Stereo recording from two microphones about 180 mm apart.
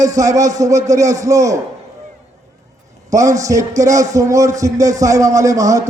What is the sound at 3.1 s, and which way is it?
A man's voice, 20° right (ahead or behind).